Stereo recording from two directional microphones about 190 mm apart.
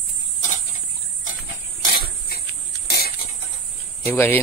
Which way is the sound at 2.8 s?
55° left (ahead or behind).